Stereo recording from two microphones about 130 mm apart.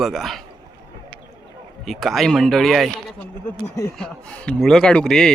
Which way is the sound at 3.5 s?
25° left (ahead or behind).